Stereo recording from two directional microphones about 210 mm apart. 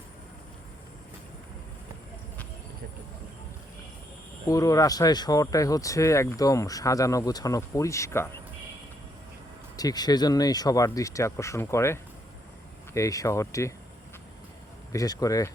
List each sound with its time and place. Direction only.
4.4 s speech: 15° left (ahead or behind)
9.7 s speech: 20° left (ahead or behind)
14.9 s speech: 15° left (ahead or behind)